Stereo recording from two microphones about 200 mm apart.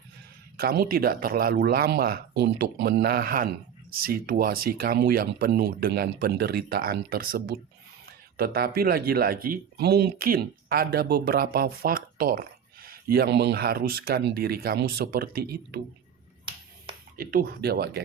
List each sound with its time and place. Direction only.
0.5 s speech: 50° right (ahead or behind)
17.2 s speech: 50° right (ahead or behind)